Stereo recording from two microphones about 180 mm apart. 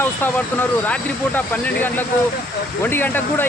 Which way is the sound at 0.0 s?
10° left (ahead or behind).